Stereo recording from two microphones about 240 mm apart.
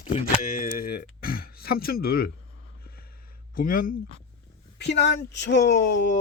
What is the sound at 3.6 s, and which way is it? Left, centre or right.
Speech, left.